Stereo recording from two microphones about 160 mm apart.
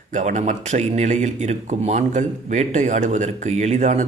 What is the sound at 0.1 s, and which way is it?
Speech, 45° right (ahead or behind).